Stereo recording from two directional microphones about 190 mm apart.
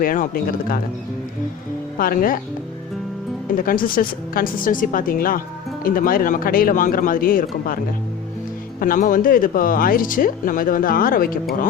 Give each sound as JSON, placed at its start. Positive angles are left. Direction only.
{"t": 0.0, "sound": "speech", "side_deg": 50}
{"t": 2.0, "sound": "speech", "side_deg": 50}
{"t": 3.5, "sound": "speech", "side_deg": 45}
{"t": 8.8, "sound": "speech", "side_deg": 45}